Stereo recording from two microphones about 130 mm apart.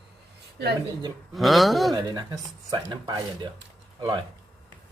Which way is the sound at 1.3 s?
Centre (ahead or behind).